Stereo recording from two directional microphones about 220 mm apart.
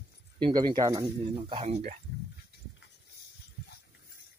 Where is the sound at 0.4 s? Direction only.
20° right (ahead or behind).